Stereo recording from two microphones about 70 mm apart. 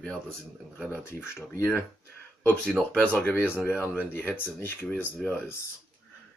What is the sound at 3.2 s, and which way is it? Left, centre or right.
Speech, left.